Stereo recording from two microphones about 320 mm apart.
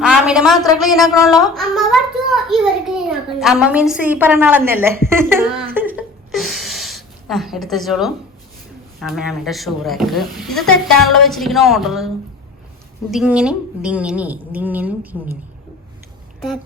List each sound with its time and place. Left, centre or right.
0.0 s a woman's voice: centre